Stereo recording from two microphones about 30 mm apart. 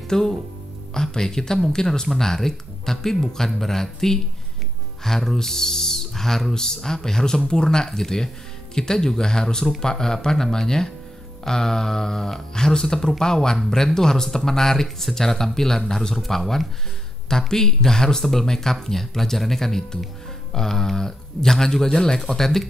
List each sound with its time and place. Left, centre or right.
0.1 s speech: centre
16.2 s speech: centre